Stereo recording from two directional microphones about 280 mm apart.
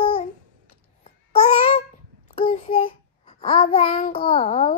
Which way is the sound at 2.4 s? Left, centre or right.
Left.